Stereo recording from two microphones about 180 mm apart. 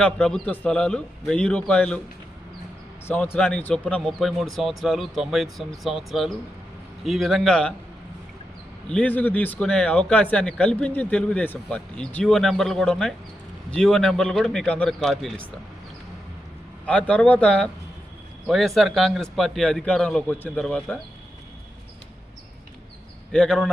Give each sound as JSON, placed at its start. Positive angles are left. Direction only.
{"t": 0.0, "sound": "speech", "side_deg": 5}
{"t": 3.3, "sound": "speech", "side_deg": 5}
{"t": 8.9, "sound": "speech", "side_deg": 5}
{"t": 16.8, "sound": "speech", "side_deg": 5}
{"t": 23.3, "sound": "speech", "side_deg": 5}